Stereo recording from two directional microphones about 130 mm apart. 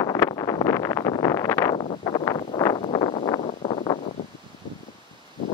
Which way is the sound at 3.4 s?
55° left (ahead or behind).